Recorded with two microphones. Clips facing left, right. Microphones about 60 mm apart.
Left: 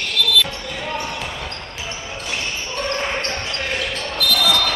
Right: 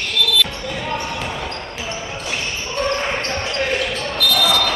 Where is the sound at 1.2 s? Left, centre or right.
Centre.